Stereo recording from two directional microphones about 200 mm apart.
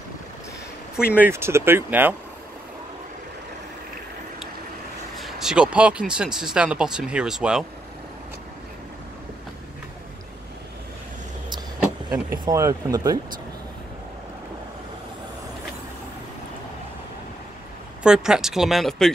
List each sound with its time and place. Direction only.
1.2 s speech: 15° right (ahead or behind)
5.1 s speech: centre (ahead or behind)
12.1 s speech: 15° right (ahead or behind)
18.0 s speech: 5° right (ahead or behind)